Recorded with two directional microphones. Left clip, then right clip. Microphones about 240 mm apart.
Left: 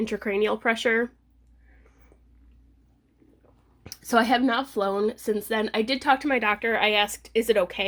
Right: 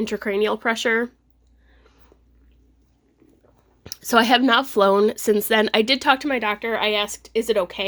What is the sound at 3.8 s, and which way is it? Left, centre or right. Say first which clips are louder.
Speech: right 4 dB; centre.